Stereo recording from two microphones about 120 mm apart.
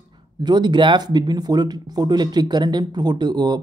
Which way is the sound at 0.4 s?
35° right (ahead or behind).